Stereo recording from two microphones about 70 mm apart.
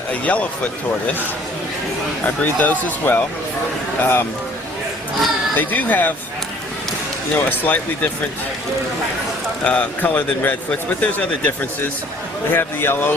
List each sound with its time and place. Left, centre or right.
0.1 s speech: centre
2.2 s speech: left
5.5 s speech: left
7.3 s speech: left
9.6 s speech: left
12.5 s speech: left